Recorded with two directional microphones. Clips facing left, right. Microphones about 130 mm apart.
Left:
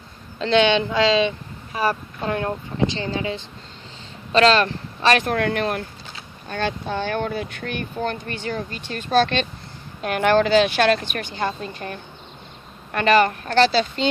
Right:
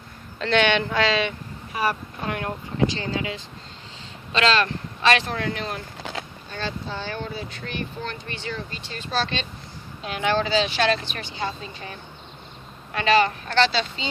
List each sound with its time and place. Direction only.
0.3 s speech: 20° left (ahead or behind)
5.2 s speech: 55° left (ahead or behind)